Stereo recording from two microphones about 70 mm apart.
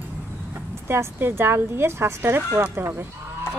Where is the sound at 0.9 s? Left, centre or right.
Right.